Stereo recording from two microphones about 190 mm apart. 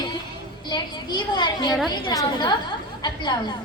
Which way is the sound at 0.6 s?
25° left (ahead or behind).